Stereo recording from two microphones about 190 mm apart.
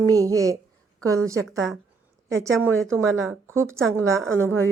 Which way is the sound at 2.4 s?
15° right (ahead or behind).